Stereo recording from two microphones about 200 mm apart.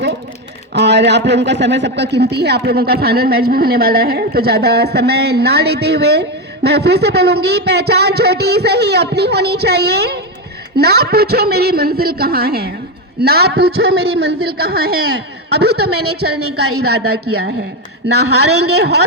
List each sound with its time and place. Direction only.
0.7 s a man's voice: 60° right (ahead or behind)
17.1 s speech: 55° right (ahead or behind)